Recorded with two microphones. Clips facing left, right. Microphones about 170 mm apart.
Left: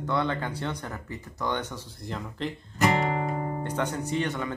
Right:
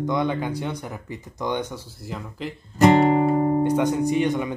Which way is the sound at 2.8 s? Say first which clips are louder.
Right 9 dB; 35° right (ahead or behind).